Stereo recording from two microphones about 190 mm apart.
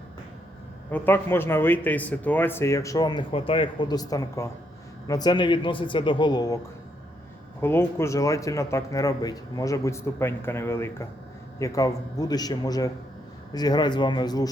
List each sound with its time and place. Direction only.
0.9 s a man's voice: 10° left (ahead or behind)
7.6 s a man's voice: 10° left (ahead or behind)